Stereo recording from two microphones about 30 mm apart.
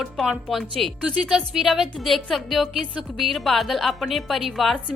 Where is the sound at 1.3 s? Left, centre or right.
Centre.